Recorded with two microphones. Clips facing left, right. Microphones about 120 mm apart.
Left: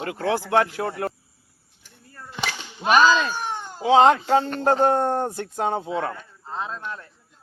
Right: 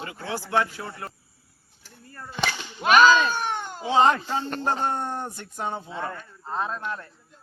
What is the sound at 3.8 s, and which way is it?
Speech, 85° left.